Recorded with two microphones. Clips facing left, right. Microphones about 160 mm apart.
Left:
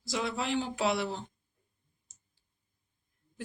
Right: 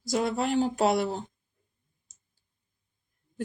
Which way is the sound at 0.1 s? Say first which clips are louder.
Right 6 dB; 45° right (ahead or behind).